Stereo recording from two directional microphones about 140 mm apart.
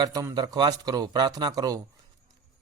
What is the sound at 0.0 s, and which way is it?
Speech, 25° right (ahead or behind).